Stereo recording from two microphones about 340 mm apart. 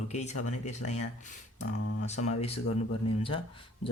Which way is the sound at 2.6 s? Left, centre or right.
Left.